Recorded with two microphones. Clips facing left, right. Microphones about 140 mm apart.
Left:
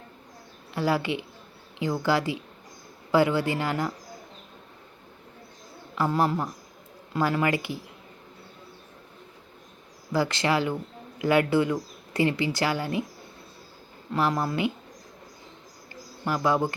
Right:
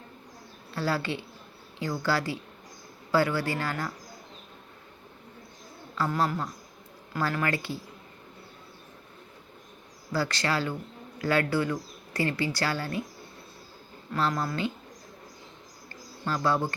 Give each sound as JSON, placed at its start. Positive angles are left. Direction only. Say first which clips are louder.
{"t": 0.7, "sound": "speech", "louder": "left 4 dB", "side_deg": 15}
{"t": 5.9, "sound": "speech", "louder": "left 3 dB", "side_deg": 20}
{"t": 10.1, "sound": "speech", "louder": "left 4 dB", "side_deg": 20}
{"t": 14.1, "sound": "speech", "louder": "left 3 dB", "side_deg": 15}
{"t": 15.9, "sound": "a sound", "louder": "left 3 dB", "side_deg": 15}